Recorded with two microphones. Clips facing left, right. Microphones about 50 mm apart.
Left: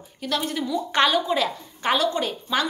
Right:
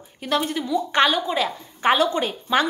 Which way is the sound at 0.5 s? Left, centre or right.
Centre.